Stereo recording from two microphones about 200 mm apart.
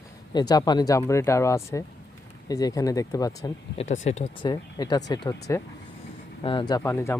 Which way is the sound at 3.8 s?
35° left (ahead or behind).